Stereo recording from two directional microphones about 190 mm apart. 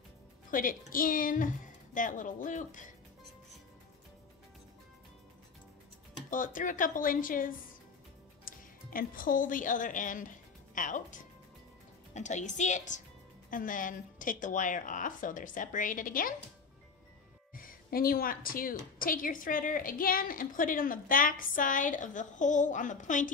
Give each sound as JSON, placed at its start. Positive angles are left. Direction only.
{"t": 0.5, "sound": "a woman's voice", "side_deg": 45}
{"t": 6.3, "sound": "a woman's voice", "side_deg": 45}
{"t": 17.6, "sound": "a woman's voice", "side_deg": 50}